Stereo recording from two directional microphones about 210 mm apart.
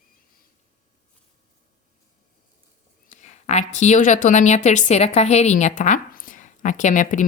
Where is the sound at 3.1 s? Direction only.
35° left (ahead or behind).